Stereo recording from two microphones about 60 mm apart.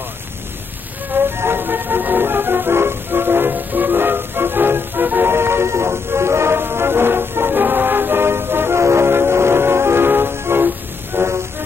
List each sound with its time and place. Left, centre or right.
1.1 s music: right
11.1 s vehicle: right